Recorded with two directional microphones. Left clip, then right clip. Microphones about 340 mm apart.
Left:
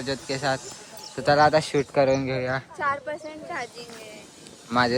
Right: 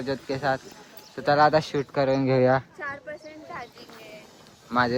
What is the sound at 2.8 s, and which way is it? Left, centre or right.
Speech, left.